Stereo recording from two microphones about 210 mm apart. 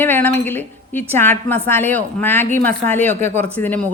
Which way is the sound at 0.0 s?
10° left (ahead or behind).